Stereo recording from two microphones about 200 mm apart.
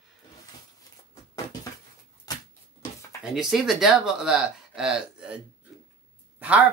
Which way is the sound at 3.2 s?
Centre (ahead or behind).